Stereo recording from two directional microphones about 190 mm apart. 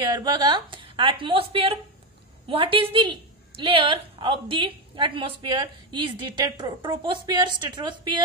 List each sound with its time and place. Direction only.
0.0 s a woman's voice: 20° right (ahead or behind)